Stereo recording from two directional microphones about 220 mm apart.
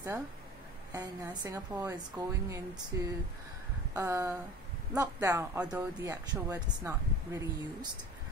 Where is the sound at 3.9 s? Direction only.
15° right (ahead or behind).